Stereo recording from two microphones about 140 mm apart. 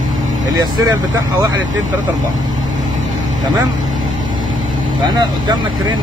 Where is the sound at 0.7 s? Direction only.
25° right (ahead or behind).